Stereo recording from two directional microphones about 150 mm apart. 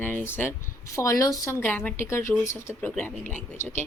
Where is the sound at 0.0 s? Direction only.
15° left (ahead or behind).